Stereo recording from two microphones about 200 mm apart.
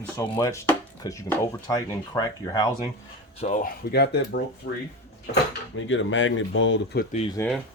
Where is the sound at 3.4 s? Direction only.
40° left (ahead or behind).